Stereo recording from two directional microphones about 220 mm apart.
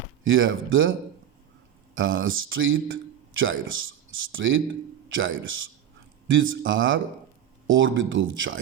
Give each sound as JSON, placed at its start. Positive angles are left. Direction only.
{"t": 0.3, "sound": "speech", "side_deg": -65}
{"t": 2.0, "sound": "speech", "side_deg": -65}